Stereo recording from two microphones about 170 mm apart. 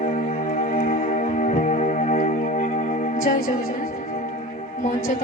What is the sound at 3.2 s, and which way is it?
Music, 60° left (ahead or behind).